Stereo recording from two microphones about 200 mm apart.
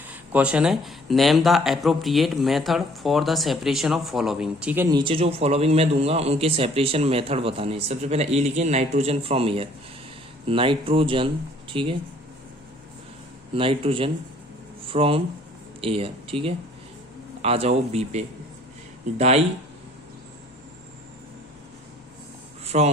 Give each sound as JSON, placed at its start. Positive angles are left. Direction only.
{"t": 0.3, "sound": "speech", "side_deg": -5}
{"t": 4.9, "sound": "a man's voice", "side_deg": -25}
{"t": 13.5, "sound": "a man's voice", "side_deg": -25}
{"t": 22.6, "sound": "a sound", "side_deg": -30}